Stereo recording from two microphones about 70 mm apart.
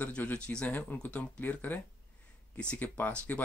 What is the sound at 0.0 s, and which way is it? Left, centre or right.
Speech, left.